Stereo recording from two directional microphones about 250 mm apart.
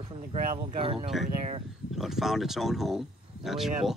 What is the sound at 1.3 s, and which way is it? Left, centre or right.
Speech, right.